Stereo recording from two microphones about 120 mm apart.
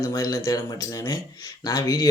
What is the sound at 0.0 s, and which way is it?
Speech, 30° left (ahead or behind).